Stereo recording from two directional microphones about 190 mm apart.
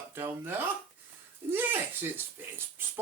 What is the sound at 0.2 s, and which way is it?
Speech, 10° right (ahead or behind).